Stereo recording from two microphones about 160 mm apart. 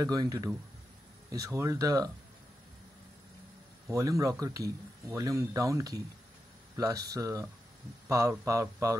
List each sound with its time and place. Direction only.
0.0 s speech: 25° right (ahead or behind)
3.8 s speech: 20° right (ahead or behind)